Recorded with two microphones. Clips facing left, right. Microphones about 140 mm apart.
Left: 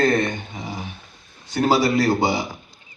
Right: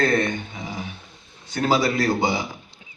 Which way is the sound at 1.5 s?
40° left (ahead or behind).